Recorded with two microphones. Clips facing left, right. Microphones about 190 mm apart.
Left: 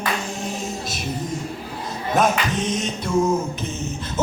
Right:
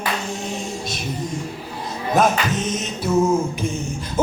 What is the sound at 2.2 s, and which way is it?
Music, centre (ahead or behind).